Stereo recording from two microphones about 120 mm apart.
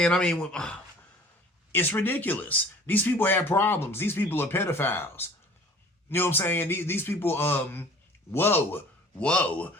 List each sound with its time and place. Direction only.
0.0 s speech: 10° left (ahead or behind)